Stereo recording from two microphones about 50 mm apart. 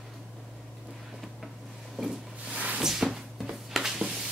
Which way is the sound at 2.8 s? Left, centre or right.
Centre.